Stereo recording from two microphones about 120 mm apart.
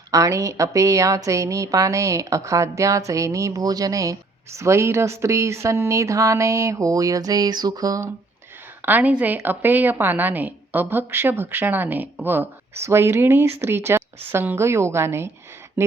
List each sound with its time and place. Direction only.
0.1 s speech: 25° right (ahead or behind)
8.8 s a woman's voice: 15° right (ahead or behind)